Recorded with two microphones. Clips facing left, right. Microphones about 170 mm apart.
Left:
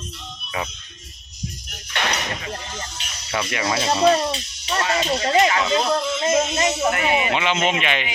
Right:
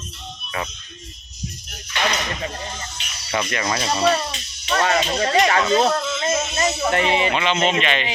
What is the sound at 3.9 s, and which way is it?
Speech, 20° left (ahead or behind).